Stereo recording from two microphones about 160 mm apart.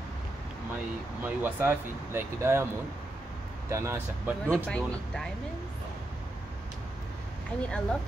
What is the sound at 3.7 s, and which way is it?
Speech, 15° right (ahead or behind).